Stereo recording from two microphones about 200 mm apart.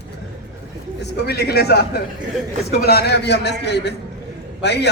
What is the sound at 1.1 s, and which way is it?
A man's voice, 55° left (ahead or behind).